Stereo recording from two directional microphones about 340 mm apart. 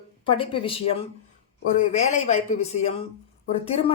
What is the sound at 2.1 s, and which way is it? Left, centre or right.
A woman's voice, left.